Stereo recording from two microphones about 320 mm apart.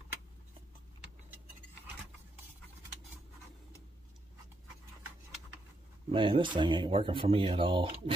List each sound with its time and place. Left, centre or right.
6.1 s speech: centre